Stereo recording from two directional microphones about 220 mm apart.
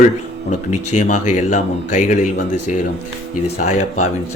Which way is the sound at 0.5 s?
30° left (ahead or behind).